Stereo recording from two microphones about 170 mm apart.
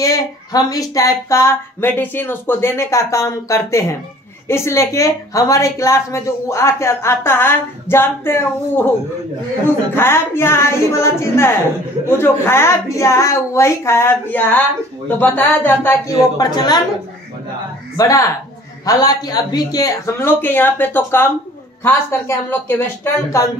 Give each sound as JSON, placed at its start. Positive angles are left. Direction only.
{"t": 0.0, "sound": "a woman's voice", "side_deg": 20}
{"t": 9.9, "sound": "a woman's voice", "side_deg": 15}
{"t": 17.9, "sound": "a woman's voice", "side_deg": 20}